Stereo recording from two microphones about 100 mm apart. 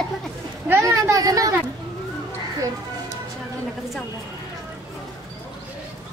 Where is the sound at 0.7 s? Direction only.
30° right (ahead or behind).